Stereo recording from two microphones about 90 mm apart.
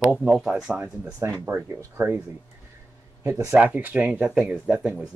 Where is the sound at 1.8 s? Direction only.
25° right (ahead or behind).